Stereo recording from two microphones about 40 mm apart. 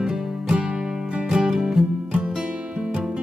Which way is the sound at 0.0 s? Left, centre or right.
Right.